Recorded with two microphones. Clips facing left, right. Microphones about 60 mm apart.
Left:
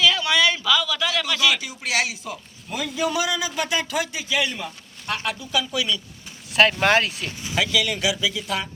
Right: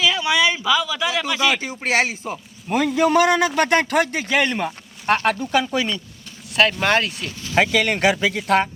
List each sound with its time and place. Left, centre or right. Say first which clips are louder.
0.0 s speech: right 1 dB; centre; by 2.4 s right
2.6 s a man's voice: right 7 dB; right
6.5 s speech: even; centre
7.5 s a man's voice: right 5 dB; right